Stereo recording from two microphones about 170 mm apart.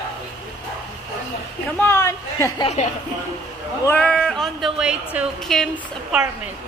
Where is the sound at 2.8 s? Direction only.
40° left (ahead or behind).